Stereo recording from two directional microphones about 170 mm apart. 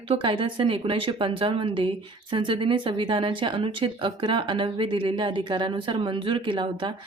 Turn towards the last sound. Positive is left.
turn(degrees=-30)  # may be behind; listen again after turning